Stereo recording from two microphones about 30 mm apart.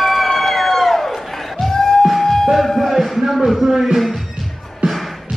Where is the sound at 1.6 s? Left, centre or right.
Centre.